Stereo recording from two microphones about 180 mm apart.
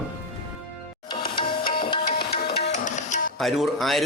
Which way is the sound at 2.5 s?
40° left (ahead or behind).